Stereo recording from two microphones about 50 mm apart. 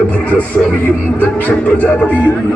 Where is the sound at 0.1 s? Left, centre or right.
Left.